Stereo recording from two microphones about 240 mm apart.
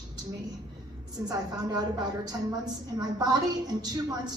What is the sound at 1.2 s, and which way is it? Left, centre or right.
A woman's voice, centre.